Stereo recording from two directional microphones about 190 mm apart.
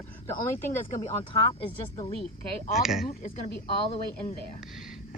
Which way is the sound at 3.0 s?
55° left (ahead or behind).